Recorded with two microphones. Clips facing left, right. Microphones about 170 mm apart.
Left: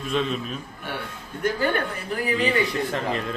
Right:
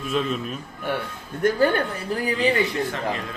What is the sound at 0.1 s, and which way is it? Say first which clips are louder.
Speech: even; 5° right (ahead or behind).